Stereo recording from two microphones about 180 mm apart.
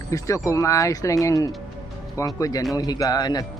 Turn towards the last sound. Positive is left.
turn(degrees=20)  # may be behind; listen again after turning